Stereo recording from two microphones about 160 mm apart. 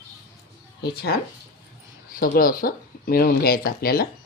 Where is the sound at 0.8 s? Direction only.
90° left.